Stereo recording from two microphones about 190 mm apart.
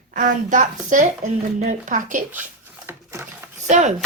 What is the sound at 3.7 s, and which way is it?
Speech, 40° right (ahead or behind).